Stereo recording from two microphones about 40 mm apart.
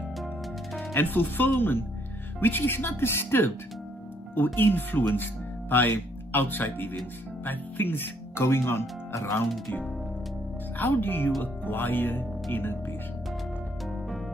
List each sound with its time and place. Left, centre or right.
0.9 s speech: left
4.6 s speech: left
10.8 s speech: left